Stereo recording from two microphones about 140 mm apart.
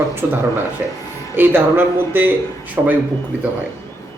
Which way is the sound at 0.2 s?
15° right (ahead or behind).